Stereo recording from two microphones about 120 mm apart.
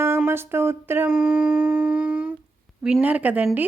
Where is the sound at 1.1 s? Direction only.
5° right (ahead or behind).